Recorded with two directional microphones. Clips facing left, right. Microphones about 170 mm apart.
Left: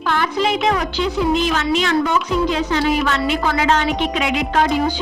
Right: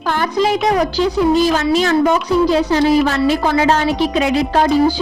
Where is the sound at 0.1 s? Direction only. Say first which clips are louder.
Right 3 dB; 40° right (ahead or behind).